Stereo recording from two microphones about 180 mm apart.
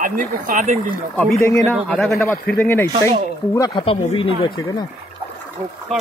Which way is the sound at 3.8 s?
30° left (ahead or behind).